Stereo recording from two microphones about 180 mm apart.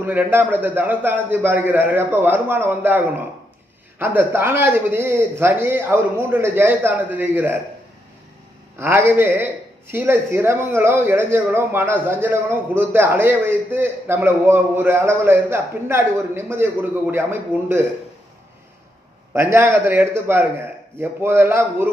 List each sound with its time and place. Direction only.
0.0 s speech: 10° right (ahead or behind)
8.8 s speech: 10° right (ahead or behind)
19.3 s speech: 15° right (ahead or behind)